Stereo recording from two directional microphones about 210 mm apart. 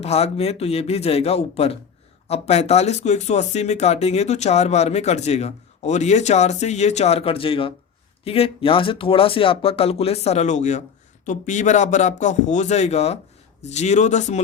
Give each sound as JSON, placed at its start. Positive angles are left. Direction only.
{"t": 0.0, "sound": "speech", "side_deg": 30}